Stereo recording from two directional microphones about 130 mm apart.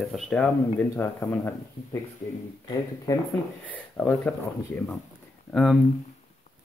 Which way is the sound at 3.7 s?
10° left (ahead or behind).